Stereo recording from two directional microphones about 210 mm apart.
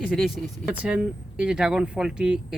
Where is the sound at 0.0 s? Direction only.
Centre (ahead or behind).